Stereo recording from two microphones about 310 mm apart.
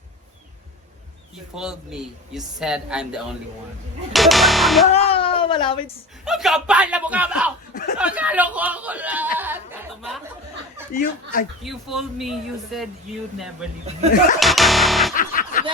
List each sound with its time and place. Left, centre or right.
1.5 s speech: centre
4.9 s a sound: centre
6.2 s speech: centre
7.7 s speech: left
7.9 s speech: centre
11.0 s speech: left
11.6 s speech: centre
14.3 s music: centre
15.1 s music: left